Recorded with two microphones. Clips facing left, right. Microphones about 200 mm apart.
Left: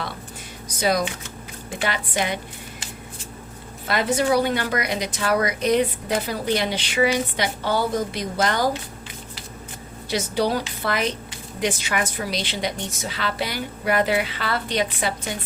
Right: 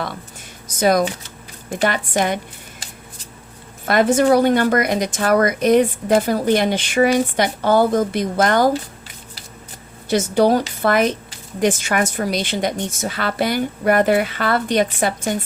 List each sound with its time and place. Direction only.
0.8 s speech: 50° right (ahead or behind)
3.8 s speech: 50° right (ahead or behind)
10.1 s speech: 50° right (ahead or behind)